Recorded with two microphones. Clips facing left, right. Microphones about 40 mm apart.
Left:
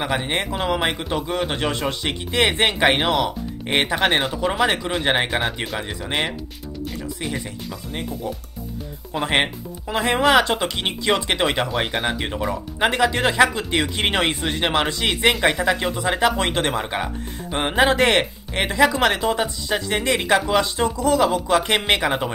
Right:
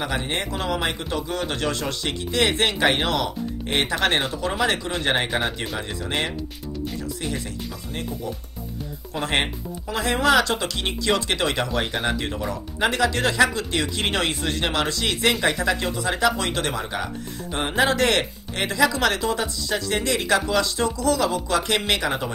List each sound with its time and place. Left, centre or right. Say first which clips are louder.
0.0 s speech: left 3 dB; left
4.1 s speech: left 2 dB; centre
4.4 s speech: left 3 dB; centre
7.2 s speech: left 3 dB; centre
9.1 s speech: left 3 dB; centre